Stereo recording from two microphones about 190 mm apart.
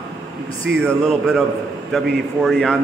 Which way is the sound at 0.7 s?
70° right (ahead or behind).